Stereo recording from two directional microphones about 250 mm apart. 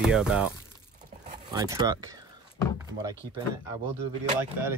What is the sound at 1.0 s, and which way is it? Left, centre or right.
Crumpling, right.